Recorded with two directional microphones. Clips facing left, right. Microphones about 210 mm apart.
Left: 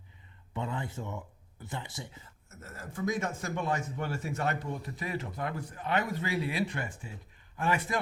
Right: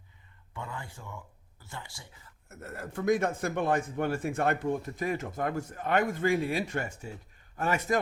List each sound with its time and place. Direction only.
0.5 s speech: 20° left (ahead or behind)
2.5 s a man's voice: 60° right (ahead or behind); by 7.9 s 45° right (ahead or behind)